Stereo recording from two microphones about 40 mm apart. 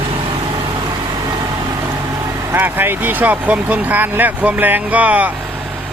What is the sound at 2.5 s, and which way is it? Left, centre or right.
Speech, right.